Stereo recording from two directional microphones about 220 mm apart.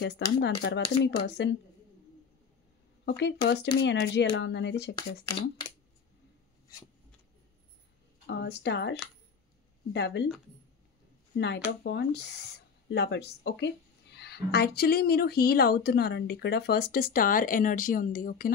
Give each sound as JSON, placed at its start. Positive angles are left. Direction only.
{"t": 0.4, "sound": "speech", "side_deg": 50}
{"t": 3.1, "sound": "speech", "side_deg": 50}
{"t": 5.2, "sound": "speech", "side_deg": 15}
{"t": 8.3, "sound": "speech", "side_deg": 50}
{"t": 9.9, "sound": "speech", "side_deg": 50}
{"t": 11.3, "sound": "speech", "side_deg": 50}